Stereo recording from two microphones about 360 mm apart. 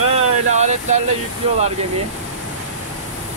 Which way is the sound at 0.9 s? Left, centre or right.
Centre.